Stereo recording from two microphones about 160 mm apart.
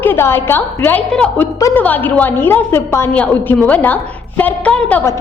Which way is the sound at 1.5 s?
20° left (ahead or behind).